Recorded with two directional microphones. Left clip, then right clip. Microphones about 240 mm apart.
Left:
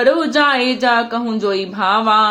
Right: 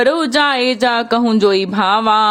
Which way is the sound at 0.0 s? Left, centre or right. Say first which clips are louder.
Even; right.